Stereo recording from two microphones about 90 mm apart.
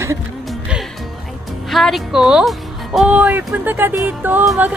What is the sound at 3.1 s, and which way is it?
Speech, 15° right (ahead or behind).